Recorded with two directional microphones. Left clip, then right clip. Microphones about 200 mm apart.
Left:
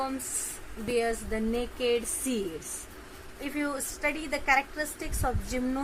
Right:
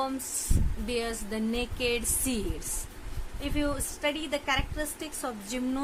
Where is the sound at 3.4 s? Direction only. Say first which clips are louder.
Right 1 dB; 10° right (ahead or behind).